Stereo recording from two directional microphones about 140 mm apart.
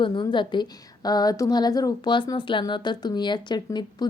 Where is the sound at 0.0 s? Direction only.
35° left (ahead or behind).